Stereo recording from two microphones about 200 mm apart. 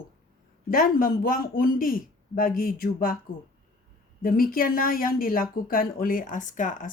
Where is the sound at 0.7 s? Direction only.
45° left (ahead or behind).